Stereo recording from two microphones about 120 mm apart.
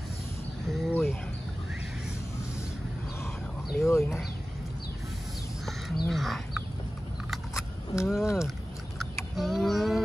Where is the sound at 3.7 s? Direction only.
20° left (ahead or behind).